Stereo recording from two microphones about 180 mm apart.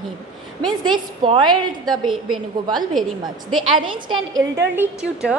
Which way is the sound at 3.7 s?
25° right (ahead or behind).